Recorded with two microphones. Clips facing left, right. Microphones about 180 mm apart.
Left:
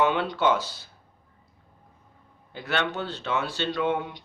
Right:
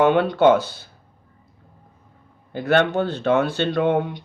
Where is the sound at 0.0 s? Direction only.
55° right (ahead or behind).